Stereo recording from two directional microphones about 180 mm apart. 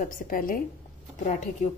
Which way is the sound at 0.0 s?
50° left (ahead or behind).